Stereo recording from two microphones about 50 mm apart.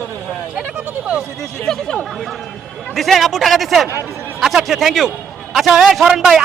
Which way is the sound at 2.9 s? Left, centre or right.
Centre.